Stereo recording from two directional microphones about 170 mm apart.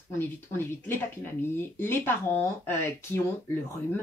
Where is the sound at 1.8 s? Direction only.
15° left (ahead or behind).